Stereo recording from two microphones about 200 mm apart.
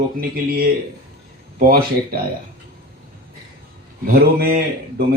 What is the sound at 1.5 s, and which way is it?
Speech, 45° right (ahead or behind).